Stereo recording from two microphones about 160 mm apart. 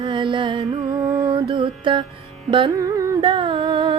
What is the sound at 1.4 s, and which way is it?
Music, 30° right (ahead or behind).